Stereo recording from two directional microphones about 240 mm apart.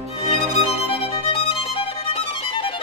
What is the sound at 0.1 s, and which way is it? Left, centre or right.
Music, left.